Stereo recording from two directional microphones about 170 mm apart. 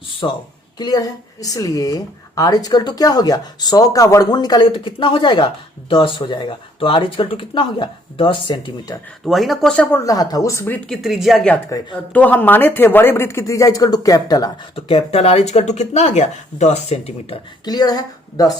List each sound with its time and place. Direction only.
0.2 s speech: 30° left (ahead or behind)
9.2 s speech: centre (ahead or behind)
10.0 s speech: 20° left (ahead or behind)
10.8 s speech: centre (ahead or behind); by 14.5 s 20° left (ahead or behind)
14.8 s speech: 35° left (ahead or behind)
17.7 s speech: 25° left (ahead or behind)